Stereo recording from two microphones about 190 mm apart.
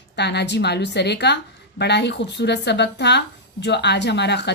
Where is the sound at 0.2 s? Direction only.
60° left (ahead or behind).